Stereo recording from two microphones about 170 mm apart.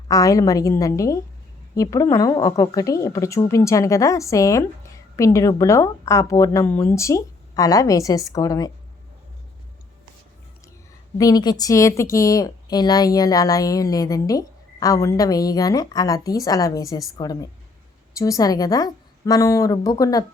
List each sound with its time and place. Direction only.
0.1 s a woman's voice: 20° left (ahead or behind)
11.2 s a woman's voice: 20° left (ahead or behind)